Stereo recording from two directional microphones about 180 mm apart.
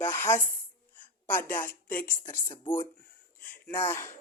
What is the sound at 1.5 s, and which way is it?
Speech, 10° left (ahead or behind).